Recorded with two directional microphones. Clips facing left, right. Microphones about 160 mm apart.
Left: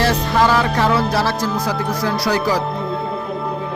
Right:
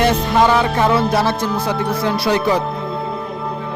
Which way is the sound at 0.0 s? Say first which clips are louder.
Right 2 dB; 20° right (ahead or behind).